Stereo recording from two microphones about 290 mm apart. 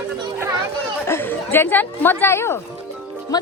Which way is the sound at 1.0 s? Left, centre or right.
Centre.